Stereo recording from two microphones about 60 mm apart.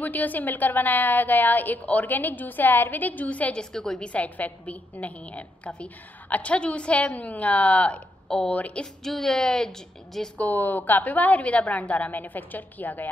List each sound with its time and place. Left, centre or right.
0.0 s a woman's voice: left
3.7 s a woman's voice: centre
4.1 s a woman's voice: left
8.3 s a woman's voice: centre
8.5 s a woman's voice: left
9.0 s a woman's voice: centre
10.3 s a woman's voice: left